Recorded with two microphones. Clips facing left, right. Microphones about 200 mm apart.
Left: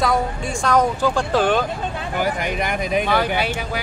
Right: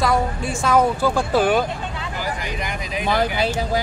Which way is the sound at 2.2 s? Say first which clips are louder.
Left 6 dB; 55° left (ahead or behind).